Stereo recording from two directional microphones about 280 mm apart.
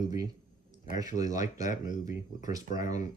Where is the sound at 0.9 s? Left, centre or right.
Centre.